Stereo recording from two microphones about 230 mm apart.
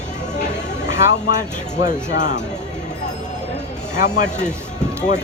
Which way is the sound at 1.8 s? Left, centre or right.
Left.